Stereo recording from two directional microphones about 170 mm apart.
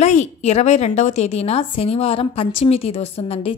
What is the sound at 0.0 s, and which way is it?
Speech, 40° left (ahead or behind).